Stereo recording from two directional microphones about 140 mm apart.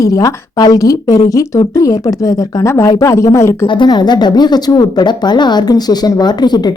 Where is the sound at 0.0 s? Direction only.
25° left (ahead or behind).